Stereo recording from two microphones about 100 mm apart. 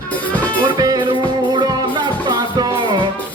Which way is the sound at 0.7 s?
40° right (ahead or behind).